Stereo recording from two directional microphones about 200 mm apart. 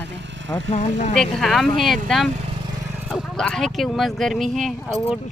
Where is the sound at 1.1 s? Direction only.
Centre (ahead or behind).